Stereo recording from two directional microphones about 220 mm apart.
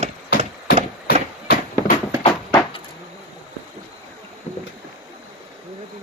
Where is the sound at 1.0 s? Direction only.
45° left (ahead or behind).